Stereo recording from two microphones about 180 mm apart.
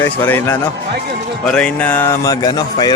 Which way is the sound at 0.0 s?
15° left (ahead or behind).